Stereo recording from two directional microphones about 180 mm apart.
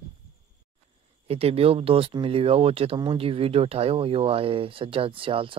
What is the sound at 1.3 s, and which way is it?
Speech, 35° right (ahead or behind).